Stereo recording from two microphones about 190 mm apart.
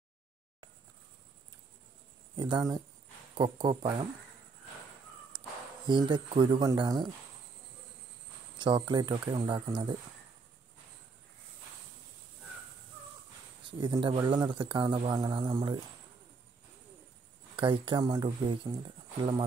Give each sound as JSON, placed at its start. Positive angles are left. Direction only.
{"t": 2.3, "sound": "speech", "side_deg": -25}
{"t": 5.3, "sound": "a sound", "side_deg": -25}
{"t": 5.9, "sound": "speech", "side_deg": -25}
{"t": 8.5, "sound": "speech", "side_deg": -25}
{"t": 13.7, "sound": "speech", "side_deg": -25}
{"t": 17.6, "sound": "speech", "side_deg": -25}